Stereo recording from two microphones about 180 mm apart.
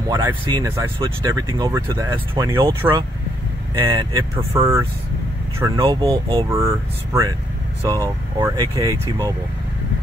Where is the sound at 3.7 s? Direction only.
20° right (ahead or behind).